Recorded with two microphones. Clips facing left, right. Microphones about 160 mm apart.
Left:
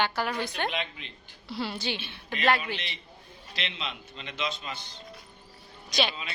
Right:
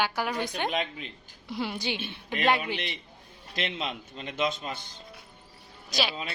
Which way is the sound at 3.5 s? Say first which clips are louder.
Right 5 dB; 50° right (ahead or behind).